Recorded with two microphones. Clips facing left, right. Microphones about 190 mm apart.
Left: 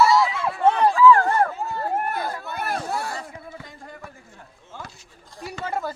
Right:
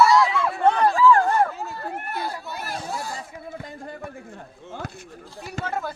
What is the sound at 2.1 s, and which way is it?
Chatter, 50° left (ahead or behind).